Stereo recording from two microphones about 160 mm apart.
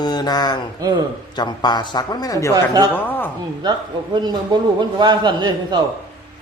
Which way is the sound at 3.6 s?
25° right (ahead or behind).